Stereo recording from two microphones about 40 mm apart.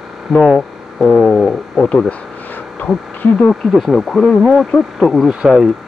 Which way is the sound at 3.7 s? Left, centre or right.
Centre.